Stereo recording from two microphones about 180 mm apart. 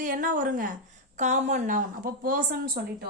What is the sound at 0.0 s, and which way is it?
A woman's voice, 50° right (ahead or behind).